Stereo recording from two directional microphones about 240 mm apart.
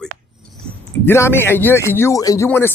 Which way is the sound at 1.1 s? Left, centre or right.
Centre.